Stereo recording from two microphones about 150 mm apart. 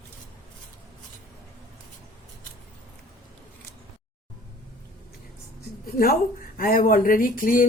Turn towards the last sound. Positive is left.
turn(degrees=65)  # may be behind; listen again after turning